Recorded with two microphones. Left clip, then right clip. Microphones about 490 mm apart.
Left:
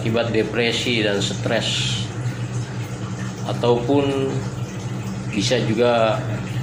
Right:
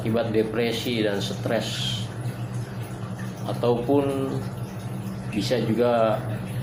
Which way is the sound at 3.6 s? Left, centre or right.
Right.